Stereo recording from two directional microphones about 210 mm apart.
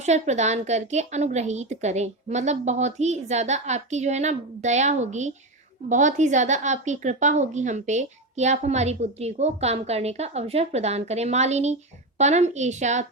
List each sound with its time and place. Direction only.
0.0 s a woman's voice: 35° right (ahead or behind)